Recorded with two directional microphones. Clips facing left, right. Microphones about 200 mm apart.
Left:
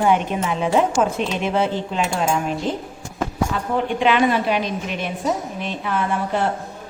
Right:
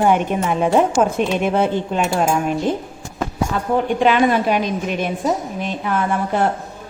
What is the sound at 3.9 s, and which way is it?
A woman's voice, 45° right (ahead or behind).